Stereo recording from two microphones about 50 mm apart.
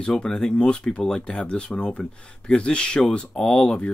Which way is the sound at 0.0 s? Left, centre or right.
Centre.